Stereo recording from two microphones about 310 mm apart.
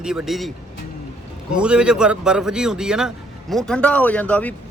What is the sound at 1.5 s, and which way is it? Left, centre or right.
Speech, centre.